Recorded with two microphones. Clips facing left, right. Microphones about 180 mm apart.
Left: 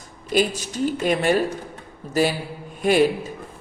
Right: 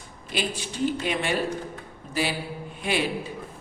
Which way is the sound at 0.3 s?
40° left (ahead or behind).